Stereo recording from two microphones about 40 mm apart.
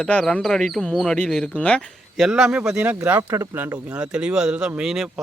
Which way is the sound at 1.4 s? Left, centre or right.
Left.